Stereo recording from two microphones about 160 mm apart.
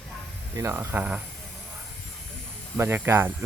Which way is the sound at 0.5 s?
15° right (ahead or behind).